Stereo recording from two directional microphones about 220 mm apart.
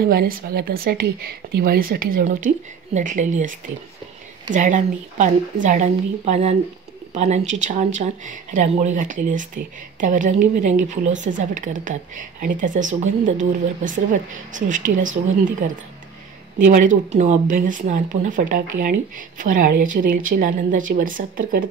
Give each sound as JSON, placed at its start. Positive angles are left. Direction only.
{"t": 0.1, "sound": "speech", "side_deg": -45}
{"t": 14.3, "sound": "speech", "side_deg": -35}